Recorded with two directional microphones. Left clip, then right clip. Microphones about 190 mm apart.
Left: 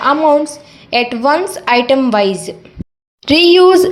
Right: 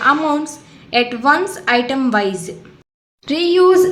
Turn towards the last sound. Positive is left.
turn(degrees=20)  # may be behind; listen again after turning